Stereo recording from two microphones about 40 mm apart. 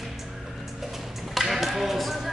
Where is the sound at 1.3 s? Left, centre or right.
Centre.